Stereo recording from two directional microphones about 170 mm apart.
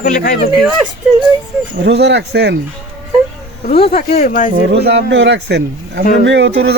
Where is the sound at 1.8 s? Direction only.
90° right.